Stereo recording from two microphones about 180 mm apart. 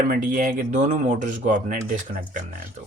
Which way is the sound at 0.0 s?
50° right (ahead or behind).